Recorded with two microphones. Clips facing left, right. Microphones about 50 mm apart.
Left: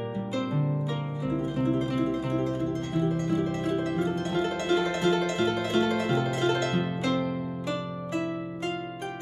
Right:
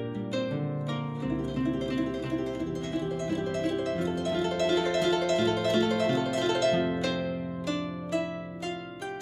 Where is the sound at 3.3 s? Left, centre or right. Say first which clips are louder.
Left 2 dB; centre.